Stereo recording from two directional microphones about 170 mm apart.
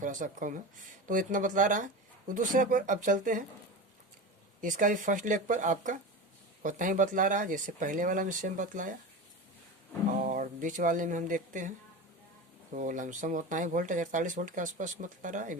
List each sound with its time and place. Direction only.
0.0 s speech: 50° right (ahead or behind)
4.6 s speech: 50° right (ahead or behind)
10.1 s speech: 50° right (ahead or behind)
12.7 s speech: 50° right (ahead or behind)